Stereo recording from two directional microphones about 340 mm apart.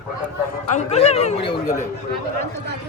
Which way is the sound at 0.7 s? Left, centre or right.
Centre.